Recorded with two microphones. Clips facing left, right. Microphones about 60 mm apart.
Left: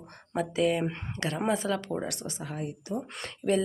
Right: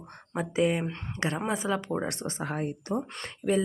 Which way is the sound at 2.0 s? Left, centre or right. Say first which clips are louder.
Right 4 dB; right.